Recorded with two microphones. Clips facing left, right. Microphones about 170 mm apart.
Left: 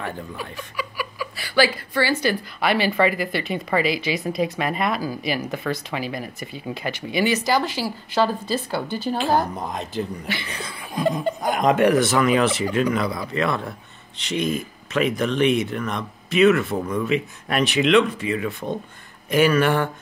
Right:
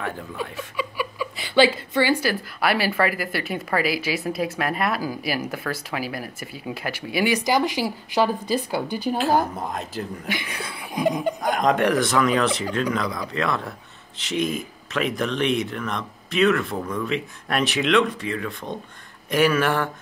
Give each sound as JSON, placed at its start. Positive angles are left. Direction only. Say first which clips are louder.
{"t": 0.7, "sound": "chuckle", "louder": "right 2 dB", "side_deg": -25}
{"t": 2.2, "sound": "speech", "louder": "left 1 dB", "side_deg": -5}
{"t": 10.2, "sound": "speech", "louder": "even", "side_deg": -15}
{"t": 11.4, "sound": "speech", "louder": "left 3 dB", "side_deg": 0}